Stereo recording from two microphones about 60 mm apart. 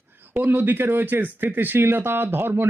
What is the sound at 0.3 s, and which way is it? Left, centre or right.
Speech, right.